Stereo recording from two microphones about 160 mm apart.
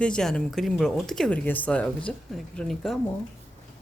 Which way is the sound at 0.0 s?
5° left (ahead or behind).